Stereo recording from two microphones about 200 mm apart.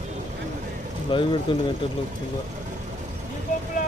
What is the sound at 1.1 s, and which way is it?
Speech, 25° left (ahead or behind).